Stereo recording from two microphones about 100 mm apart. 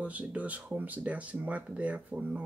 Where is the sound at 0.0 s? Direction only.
15° right (ahead or behind).